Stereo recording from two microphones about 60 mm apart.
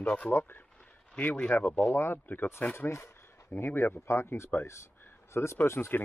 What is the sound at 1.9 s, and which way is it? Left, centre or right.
Speech, left.